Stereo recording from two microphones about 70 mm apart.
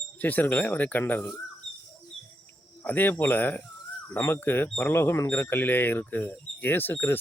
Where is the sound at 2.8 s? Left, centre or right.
Left.